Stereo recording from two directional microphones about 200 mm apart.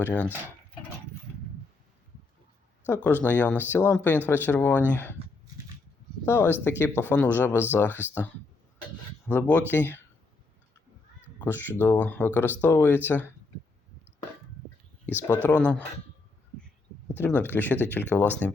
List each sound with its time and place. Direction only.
0.0 s speech: 5° left (ahead or behind)
2.8 s speech: 10° left (ahead or behind)
6.2 s speech: 10° left (ahead or behind)
11.4 s speech: 10° left (ahead or behind)
15.0 s speech: 10° left (ahead or behind)
17.2 s speech: 10° left (ahead or behind)